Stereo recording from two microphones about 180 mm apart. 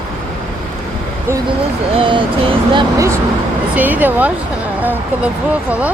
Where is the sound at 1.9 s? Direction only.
25° right (ahead or behind).